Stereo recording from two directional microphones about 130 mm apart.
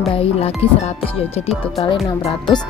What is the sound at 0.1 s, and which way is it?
Speech, 50° left (ahead or behind).